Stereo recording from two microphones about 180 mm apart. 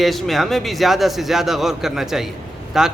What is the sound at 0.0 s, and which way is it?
A man's voice, centre (ahead or behind).